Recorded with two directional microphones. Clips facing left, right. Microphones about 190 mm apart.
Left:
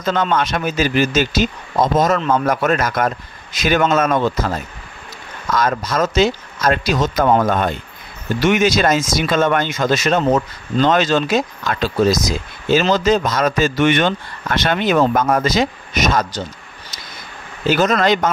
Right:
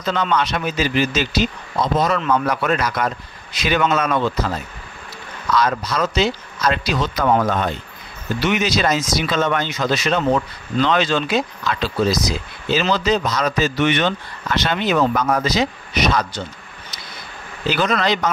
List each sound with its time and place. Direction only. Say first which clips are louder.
0.0 s speech: left 2 dB; 50° left (ahead or behind)
17.6 s speech: left 4 dB; 45° left (ahead or behind)